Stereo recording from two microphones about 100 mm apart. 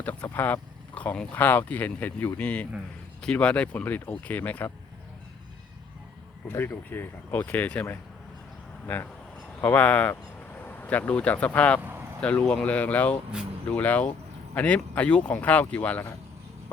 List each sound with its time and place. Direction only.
0.0 s speech: 15° left (ahead or behind)
6.5 s speech: 20° left (ahead or behind)
9.6 s speech: 15° left (ahead or behind)
11.8 s a sound: 20° right (ahead or behind)
12.2 s speech: 10° left (ahead or behind)